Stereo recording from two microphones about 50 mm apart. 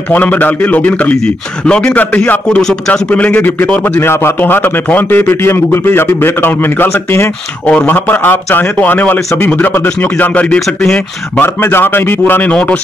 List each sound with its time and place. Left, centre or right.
0.1 s a man's voice: left
1.2 s speech: centre
2.0 s a man's voice: left
4.0 s a man's voice: left
4.8 s a man's voice: left
5.2 s a man's voice: left
7.6 s a man's voice: left
7.9 s a man's voice: left
11.4 s a man's voice: left